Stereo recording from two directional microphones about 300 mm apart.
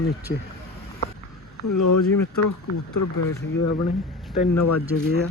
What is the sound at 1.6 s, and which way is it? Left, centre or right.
Speech, left.